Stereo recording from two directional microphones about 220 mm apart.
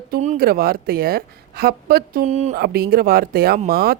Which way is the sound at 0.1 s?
35° right (ahead or behind).